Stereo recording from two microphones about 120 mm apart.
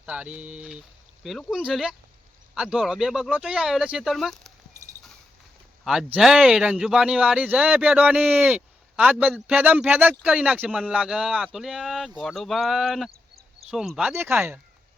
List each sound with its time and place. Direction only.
0.0 s speech: 10° right (ahead or behind)
5.8 s speech: 5° right (ahead or behind)
14.2 s speech: 20° right (ahead or behind)